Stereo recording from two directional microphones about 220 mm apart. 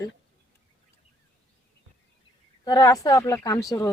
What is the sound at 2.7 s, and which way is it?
Speech, 15° left (ahead or behind).